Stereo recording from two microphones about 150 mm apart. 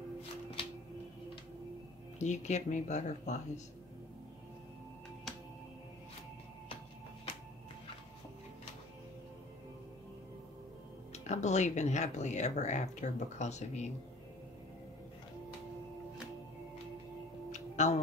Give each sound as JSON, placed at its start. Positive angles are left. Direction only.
{"t": 2.1, "sound": "speech", "side_deg": 50}
{"t": 11.2, "sound": "speech", "side_deg": 50}
{"t": 17.5, "sound": "music", "side_deg": 50}